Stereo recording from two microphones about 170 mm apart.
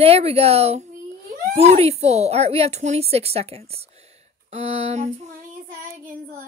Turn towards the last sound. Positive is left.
turn(degrees=-55)  # may be behind; listen again after turning